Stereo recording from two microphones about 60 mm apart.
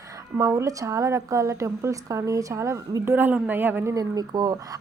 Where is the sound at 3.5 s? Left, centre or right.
Right.